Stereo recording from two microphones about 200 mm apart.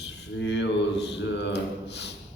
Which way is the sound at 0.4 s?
60° left (ahead or behind).